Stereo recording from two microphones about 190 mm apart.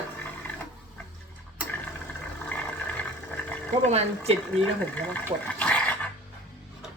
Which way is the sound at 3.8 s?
35° right (ahead or behind).